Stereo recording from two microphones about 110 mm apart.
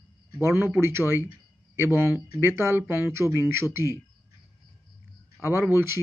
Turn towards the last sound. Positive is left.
turn(degrees=-20)  # may be behind; listen again after turning